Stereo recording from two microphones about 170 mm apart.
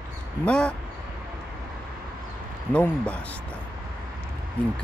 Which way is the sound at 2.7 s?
10° left (ahead or behind).